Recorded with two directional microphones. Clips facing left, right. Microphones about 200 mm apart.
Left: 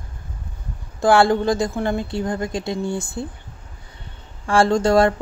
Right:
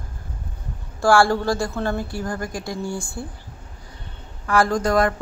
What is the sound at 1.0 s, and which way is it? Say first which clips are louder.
A woman's voice: left 2 dB; 20° left (ahead or behind).